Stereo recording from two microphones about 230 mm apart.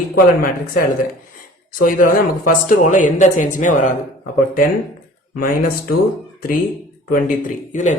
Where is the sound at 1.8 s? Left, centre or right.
Left.